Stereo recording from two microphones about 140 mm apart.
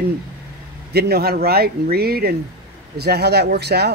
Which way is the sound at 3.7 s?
90° right.